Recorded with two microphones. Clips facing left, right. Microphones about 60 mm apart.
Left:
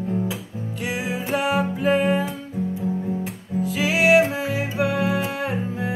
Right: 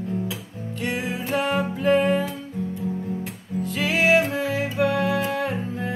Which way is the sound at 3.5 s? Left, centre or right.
Centre.